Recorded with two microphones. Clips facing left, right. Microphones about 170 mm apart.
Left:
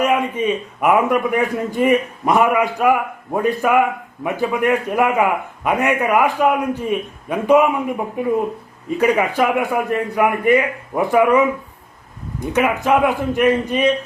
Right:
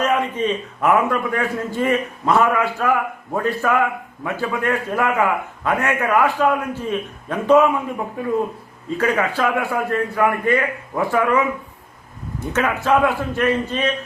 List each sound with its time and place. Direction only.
0.0 s a man's voice: 10° left (ahead or behind)